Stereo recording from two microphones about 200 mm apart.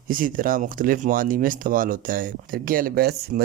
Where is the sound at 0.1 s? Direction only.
45° right (ahead or behind).